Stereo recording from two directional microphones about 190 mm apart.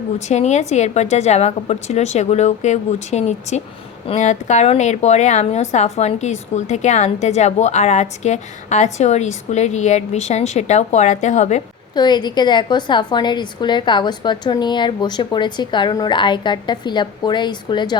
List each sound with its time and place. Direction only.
0.2 s a woman's voice: 35° left (ahead or behind)
11.9 s a woman's voice: 20° left (ahead or behind)